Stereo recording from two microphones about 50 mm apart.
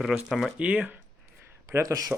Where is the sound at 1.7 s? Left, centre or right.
Right.